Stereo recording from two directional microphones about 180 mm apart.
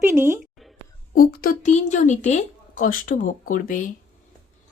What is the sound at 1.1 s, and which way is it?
Speech, 55° left (ahead or behind).